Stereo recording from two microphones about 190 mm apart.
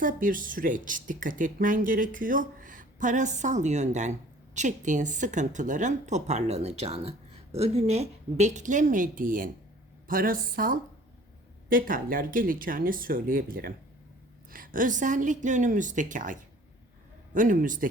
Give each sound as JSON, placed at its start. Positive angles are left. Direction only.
{"t": 0.0, "sound": "speech", "side_deg": -45}